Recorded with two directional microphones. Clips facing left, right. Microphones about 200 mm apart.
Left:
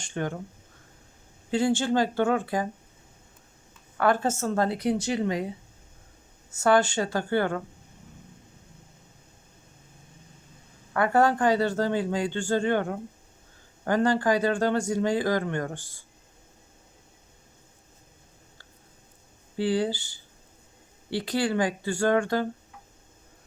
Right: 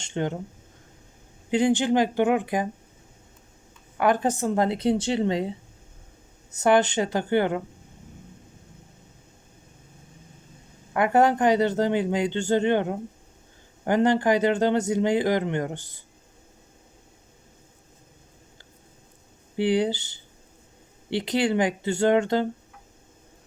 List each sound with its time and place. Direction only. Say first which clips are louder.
0.0 s speech: right 3 dB; 20° right (ahead or behind)
1.5 s speech: right 3 dB; 20° right (ahead or behind)
3.9 s speech: right 2 dB; 15° right (ahead or behind)
10.9 s speech: right 2 dB; 20° right (ahead or behind)
19.5 s speech: right 3 dB; 20° right (ahead or behind)